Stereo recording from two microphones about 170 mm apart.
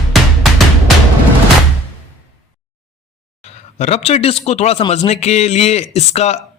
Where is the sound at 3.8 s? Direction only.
40° left (ahead or behind).